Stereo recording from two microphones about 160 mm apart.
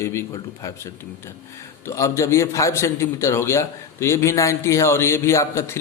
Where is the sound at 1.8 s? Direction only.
20° left (ahead or behind).